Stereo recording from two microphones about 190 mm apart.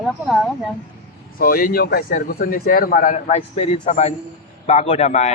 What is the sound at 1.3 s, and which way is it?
A man's voice, 50° left (ahead or behind).